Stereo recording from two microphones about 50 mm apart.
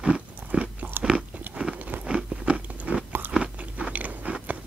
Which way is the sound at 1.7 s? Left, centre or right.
Right.